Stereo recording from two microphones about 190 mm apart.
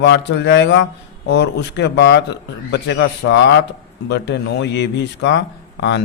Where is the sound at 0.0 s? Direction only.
65° left (ahead or behind).